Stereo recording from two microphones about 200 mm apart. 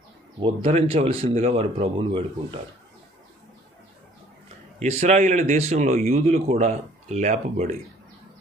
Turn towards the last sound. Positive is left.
turn(degrees=-35)  # may be behind; listen again after turning